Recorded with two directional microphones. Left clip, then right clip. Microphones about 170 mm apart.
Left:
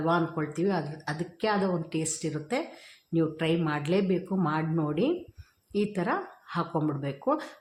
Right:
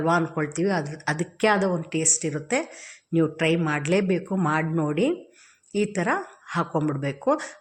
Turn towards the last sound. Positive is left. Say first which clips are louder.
# right 5 dB
turn(degrees=-10)  # may be behind; listen again after turning